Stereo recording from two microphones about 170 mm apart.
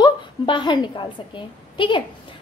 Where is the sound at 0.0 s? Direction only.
30° left (ahead or behind).